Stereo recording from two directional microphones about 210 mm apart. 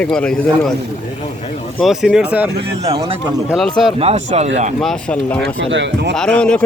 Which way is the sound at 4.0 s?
30° right (ahead or behind).